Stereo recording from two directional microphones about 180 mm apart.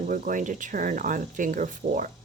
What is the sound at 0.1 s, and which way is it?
Speech, 45° right (ahead or behind).